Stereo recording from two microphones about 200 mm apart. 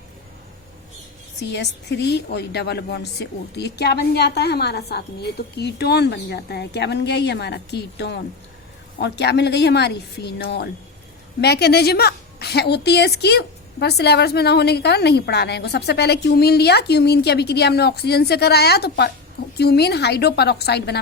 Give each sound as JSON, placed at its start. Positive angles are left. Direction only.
{"t": 1.4, "sound": "a woman's voice", "side_deg": 60}